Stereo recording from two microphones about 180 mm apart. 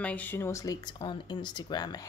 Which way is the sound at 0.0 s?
10° left (ahead or behind).